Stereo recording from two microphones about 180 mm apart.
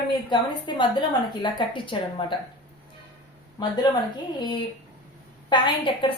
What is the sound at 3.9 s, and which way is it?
A woman's voice, 20° left (ahead or behind).